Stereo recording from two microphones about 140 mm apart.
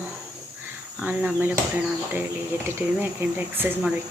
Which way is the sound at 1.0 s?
10° right (ahead or behind).